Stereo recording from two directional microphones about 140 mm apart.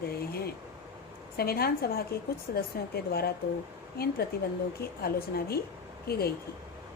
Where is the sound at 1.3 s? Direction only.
90° left.